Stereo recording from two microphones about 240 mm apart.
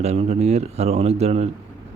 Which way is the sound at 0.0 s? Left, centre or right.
Right.